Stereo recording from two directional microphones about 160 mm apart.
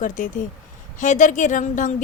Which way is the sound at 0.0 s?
55° left (ahead or behind).